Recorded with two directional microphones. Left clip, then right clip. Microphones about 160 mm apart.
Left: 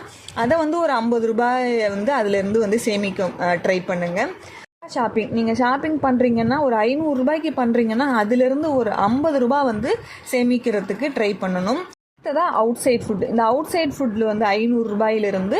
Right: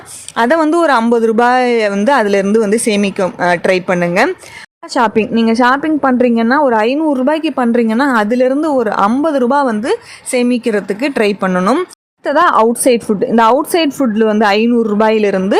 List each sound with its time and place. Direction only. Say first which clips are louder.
0.3 s a woman's voice: right 8 dB; 30° right (ahead or behind)